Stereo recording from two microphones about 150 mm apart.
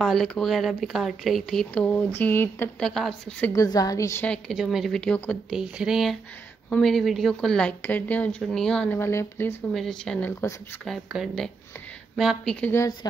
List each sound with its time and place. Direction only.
0.0 s speech: centre (ahead or behind)
2.9 s speech: centre (ahead or behind)
3.5 s a woman's voice: 25° left (ahead or behind)
4.3 s speech: centre (ahead or behind)
5.6 s speech: 5° right (ahead or behind); by 9.6 s 15° left (ahead or behind)
9.8 s speech: 5° left (ahead or behind)
12.5 s speech: 10° left (ahead or behind)
13.0 s a woman's voice: 25° left (ahead or behind)